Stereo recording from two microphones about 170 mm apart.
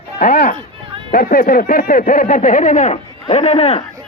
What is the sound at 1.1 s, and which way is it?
Speech, 60° left (ahead or behind).